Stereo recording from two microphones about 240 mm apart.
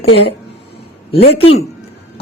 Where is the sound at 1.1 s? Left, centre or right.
Left.